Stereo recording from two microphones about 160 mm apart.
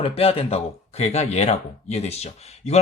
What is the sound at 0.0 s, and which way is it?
Speech, 35° left (ahead or behind).